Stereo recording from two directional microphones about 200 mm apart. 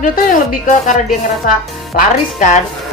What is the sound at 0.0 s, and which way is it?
Speech, 40° left (ahead or behind).